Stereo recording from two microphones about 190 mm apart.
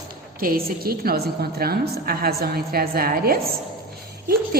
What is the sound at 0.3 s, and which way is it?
A woman's voice, 50° right (ahead or behind).